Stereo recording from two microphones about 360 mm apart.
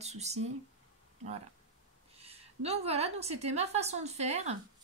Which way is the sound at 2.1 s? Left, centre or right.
Centre.